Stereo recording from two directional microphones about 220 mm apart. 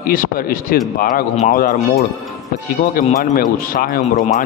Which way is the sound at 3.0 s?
35° left (ahead or behind).